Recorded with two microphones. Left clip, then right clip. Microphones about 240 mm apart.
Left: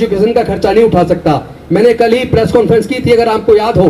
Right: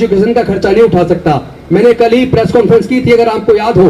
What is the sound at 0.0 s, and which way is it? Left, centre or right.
A man's voice, left.